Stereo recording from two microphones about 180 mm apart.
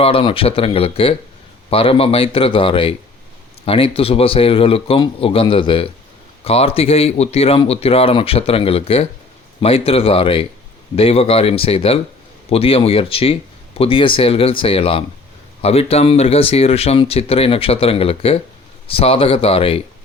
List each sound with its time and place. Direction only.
0.0 s speech: 30° left (ahead or behind)